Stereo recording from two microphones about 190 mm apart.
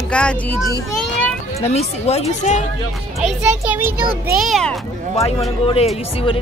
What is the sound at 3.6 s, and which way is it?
Speech, 10° right (ahead or behind).